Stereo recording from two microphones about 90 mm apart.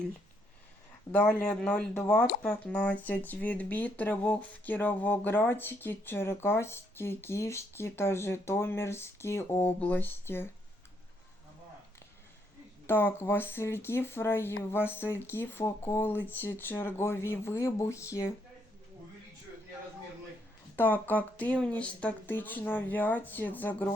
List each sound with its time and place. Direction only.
1.1 s speech: 10° left (ahead or behind)
12.9 s speech: 25° left (ahead or behind)
20.7 s speech: 20° left (ahead or behind)